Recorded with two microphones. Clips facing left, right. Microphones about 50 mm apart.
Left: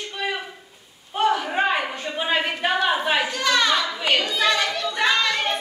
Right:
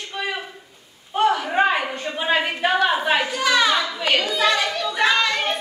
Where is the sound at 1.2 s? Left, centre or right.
Centre.